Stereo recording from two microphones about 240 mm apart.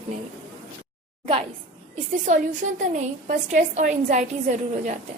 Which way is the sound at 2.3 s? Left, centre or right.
Right.